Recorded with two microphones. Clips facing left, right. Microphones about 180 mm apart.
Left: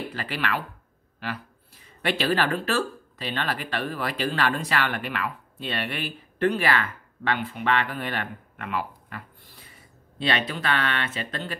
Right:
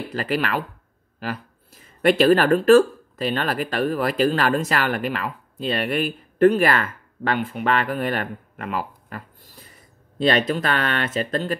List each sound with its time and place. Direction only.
0.1 s speech: 40° right (ahead or behind)